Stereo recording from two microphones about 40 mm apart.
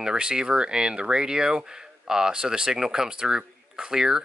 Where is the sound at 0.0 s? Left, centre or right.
Centre.